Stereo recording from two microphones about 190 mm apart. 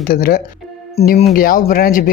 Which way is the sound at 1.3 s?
50° left (ahead or behind).